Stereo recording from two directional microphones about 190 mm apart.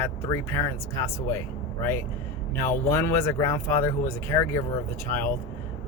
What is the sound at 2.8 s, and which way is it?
Speech, 15° left (ahead or behind).